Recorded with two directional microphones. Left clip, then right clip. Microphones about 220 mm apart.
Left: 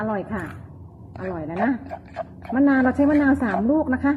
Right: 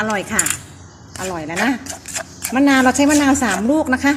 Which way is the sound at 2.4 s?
25° right (ahead or behind).